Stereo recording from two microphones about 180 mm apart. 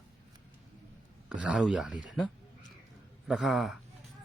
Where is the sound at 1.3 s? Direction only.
5° right (ahead or behind).